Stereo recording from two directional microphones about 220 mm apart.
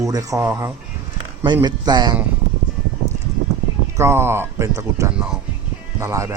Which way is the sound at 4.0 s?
10° right (ahead or behind).